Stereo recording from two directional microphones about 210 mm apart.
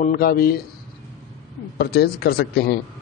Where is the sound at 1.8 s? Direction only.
50° left (ahead or behind).